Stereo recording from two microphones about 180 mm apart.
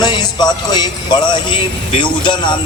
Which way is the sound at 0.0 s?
25° left (ahead or behind).